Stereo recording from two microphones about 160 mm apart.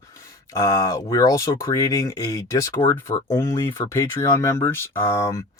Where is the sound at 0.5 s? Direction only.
20° left (ahead or behind).